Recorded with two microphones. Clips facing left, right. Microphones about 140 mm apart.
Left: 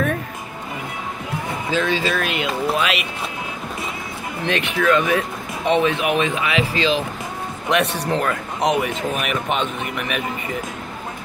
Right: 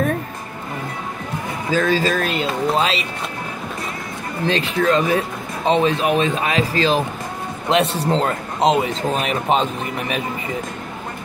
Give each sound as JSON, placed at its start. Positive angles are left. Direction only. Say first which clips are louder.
{"t": 1.7, "sound": "a man's voice", "louder": "right 3 dB", "side_deg": -40}
{"t": 4.5, "sound": "a man's voice", "louder": "right 1 dB", "side_deg": -35}
{"t": 7.7, "sound": "speech", "louder": "right 2 dB", "side_deg": -30}